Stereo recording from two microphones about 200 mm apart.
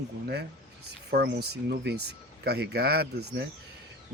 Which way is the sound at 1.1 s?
50° right (ahead or behind).